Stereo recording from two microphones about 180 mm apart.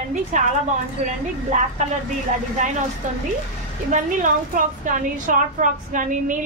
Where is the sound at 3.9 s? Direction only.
45° right (ahead or behind).